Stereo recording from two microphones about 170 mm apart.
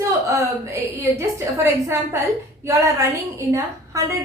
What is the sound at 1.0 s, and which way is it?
A woman's voice, 15° right (ahead or behind).